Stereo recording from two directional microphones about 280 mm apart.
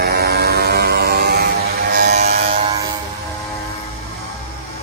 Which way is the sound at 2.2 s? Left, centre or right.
Right.